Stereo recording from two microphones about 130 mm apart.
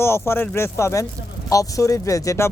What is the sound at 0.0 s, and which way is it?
Speech, 20° left (ahead or behind).